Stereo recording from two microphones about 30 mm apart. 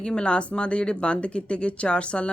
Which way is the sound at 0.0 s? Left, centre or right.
Left.